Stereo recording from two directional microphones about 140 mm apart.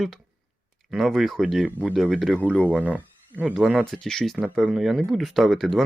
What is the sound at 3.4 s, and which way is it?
Speech, centre (ahead or behind).